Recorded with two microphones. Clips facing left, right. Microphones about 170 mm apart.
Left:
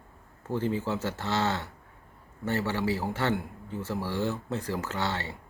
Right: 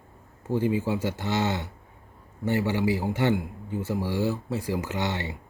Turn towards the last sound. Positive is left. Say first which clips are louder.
# right 2 dB
turn(degrees=-15)  # may be behind; listen again after turning